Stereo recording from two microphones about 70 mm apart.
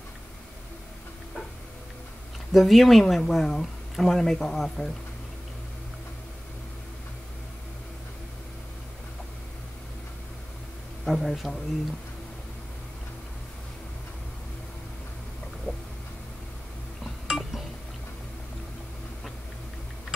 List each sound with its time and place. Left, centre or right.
2.5 s speech: centre
11.1 s speech: centre
15.7 s a sound: left
17.0 s chink: centre